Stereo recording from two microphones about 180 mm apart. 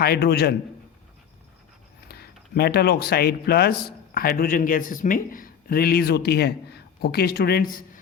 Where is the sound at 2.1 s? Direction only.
60° left (ahead or behind).